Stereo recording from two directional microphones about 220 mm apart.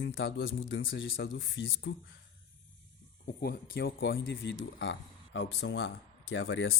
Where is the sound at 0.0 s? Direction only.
55° left (ahead or behind).